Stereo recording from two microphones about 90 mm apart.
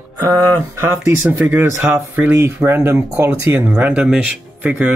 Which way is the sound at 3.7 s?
15° right (ahead or behind).